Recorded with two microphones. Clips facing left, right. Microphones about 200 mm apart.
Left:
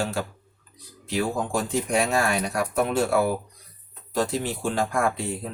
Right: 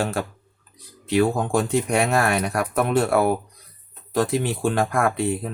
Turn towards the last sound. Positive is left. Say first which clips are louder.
# right 4 dB
turn(degrees=-60)  # may be behind; listen again after turning